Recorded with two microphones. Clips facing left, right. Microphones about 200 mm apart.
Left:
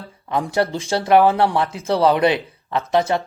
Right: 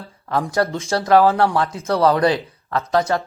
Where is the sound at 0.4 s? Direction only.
30° left (ahead or behind).